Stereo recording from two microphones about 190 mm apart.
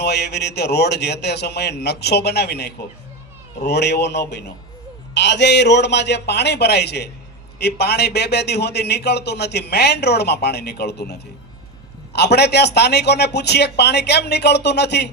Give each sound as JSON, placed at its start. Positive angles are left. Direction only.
{"t": 0.0, "sound": "a man's voice", "side_deg": 60}